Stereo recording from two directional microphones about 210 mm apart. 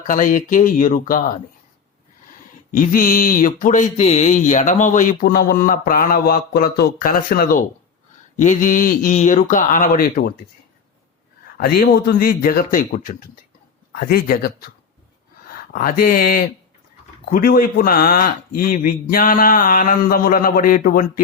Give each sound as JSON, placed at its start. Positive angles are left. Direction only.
{"t": 0.1, "sound": "speech", "side_deg": 40}
{"t": 2.7, "sound": "speech", "side_deg": 40}
{"t": 11.5, "sound": "speech", "side_deg": 45}
{"t": 15.7, "sound": "speech", "side_deg": 45}